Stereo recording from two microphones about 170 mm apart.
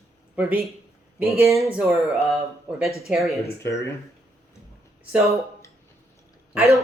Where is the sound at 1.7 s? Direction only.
5° right (ahead or behind).